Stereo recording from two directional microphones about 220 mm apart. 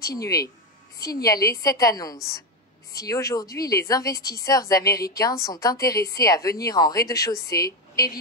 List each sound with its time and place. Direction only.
0.0 s a woman's voice: 15° left (ahead or behind)